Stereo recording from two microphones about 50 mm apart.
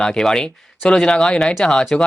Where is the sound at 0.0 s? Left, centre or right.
Centre.